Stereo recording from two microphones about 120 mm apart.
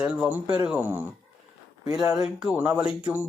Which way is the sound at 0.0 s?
10° right (ahead or behind).